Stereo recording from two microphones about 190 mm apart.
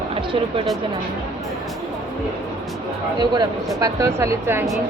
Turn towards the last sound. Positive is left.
turn(degrees=-10)  # may be behind; listen again after turning